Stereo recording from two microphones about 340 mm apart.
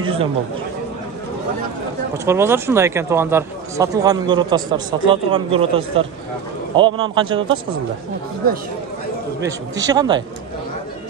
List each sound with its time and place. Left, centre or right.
0.0 s speech: centre
2.2 s speech: centre
9.4 s speech: centre